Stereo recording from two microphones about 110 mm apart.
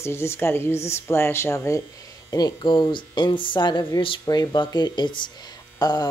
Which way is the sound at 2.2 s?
35° left (ahead or behind).